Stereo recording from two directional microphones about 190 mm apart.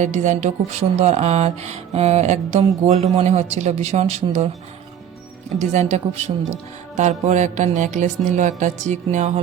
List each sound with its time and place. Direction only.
0.0 s speech: 40° right (ahead or behind)
5.5 s speech: 35° right (ahead or behind)